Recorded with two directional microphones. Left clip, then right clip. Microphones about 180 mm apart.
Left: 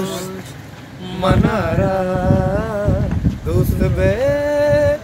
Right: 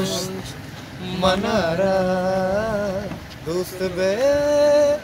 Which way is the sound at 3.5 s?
15° left (ahead or behind).